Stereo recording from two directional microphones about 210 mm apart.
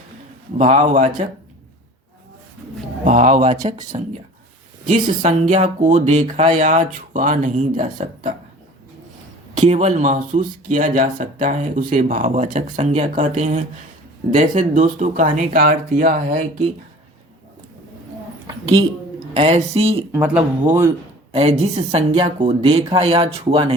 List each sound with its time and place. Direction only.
0.6 s speech: 35° right (ahead or behind)
3.0 s speech: 35° right (ahead or behind)
9.6 s speech: 35° right (ahead or behind)
18.4 s a sound: 15° right (ahead or behind)
19.3 s speech: 30° right (ahead or behind)
20.1 s speech: 10° right (ahead or behind)
21.3 s speech: 30° right (ahead or behind)